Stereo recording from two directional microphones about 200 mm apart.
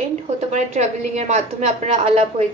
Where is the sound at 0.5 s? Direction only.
35° right (ahead or behind).